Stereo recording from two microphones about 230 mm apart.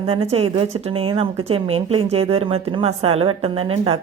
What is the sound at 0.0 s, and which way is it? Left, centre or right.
Speech, right.